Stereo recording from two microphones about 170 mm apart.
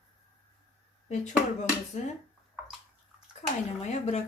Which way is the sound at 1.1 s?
45° left (ahead or behind).